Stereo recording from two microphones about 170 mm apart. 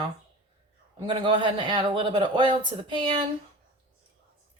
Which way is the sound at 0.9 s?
30° right (ahead or behind).